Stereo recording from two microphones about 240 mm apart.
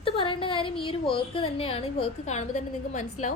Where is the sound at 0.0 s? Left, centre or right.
Left.